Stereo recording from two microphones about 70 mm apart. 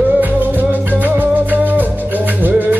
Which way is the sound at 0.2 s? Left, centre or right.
Right.